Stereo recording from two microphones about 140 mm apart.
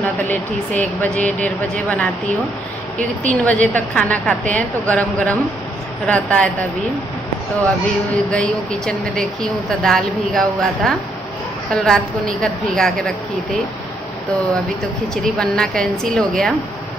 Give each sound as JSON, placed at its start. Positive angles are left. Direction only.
{"t": 0.0, "sound": "speech", "side_deg": 15}
{"t": 7.8, "sound": "speech", "side_deg": 10}
{"t": 15.3, "sound": "speech", "side_deg": 5}